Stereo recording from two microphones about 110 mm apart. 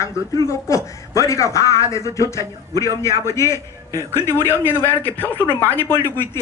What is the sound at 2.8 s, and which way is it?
A man's voice, 35° right (ahead or behind).